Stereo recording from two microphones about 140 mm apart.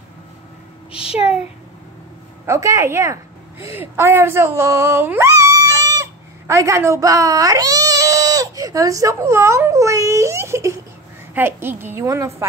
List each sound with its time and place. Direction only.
1.1 s speech: 5° right (ahead or behind)
2.4 s a woman's voice: 20° right (ahead or behind)